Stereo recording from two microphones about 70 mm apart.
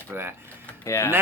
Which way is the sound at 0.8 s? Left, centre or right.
Left.